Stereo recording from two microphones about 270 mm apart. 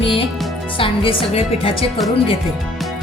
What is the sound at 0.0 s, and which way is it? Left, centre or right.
Music, centre.